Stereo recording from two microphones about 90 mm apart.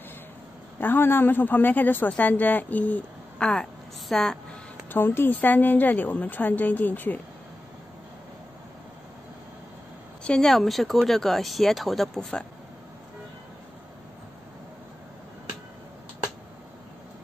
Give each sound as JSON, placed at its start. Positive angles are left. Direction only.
{"t": 0.7, "sound": "speech", "side_deg": 20}
{"t": 4.9, "sound": "speech", "side_deg": 25}
{"t": 10.2, "sound": "speech", "side_deg": 5}